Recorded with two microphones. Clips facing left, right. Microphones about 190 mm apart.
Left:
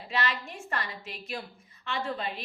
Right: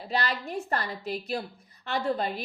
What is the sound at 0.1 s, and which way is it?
A woman's voice, 35° right (ahead or behind).